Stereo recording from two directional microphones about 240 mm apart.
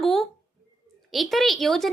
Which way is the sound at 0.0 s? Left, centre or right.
Centre.